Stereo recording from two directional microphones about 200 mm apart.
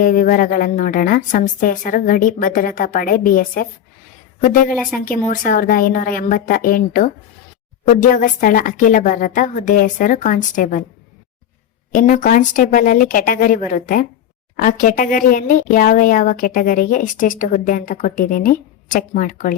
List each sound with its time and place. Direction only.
0.0 s a woman's voice: 40° left (ahead or behind)
4.9 s a woman's voice: 45° left (ahead or behind)
11.9 s speech: 40° left (ahead or behind)